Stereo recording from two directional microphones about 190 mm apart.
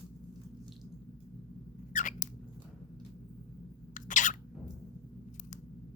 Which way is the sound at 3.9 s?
40° left (ahead or behind).